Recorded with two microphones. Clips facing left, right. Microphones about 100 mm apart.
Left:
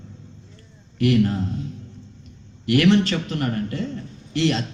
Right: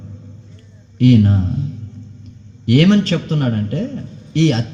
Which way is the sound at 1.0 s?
30° right (ahead or behind).